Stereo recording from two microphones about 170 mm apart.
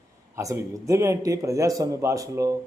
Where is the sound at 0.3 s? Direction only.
20° right (ahead or behind).